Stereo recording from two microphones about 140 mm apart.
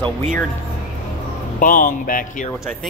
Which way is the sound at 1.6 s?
85° left.